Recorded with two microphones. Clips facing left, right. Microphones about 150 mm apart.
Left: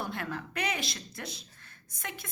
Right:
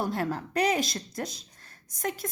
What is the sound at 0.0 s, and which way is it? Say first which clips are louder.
A woman's voice: right 7 dB; 35° right (ahead or behind).